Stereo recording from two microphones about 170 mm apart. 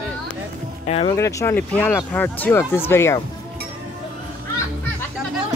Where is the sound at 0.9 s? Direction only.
40° left (ahead or behind).